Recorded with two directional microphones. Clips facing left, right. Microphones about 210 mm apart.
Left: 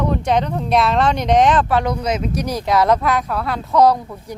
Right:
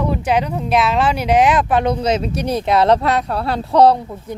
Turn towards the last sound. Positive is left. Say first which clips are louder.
# right 2 dB
turn(degrees=-30)  # may be behind; listen again after turning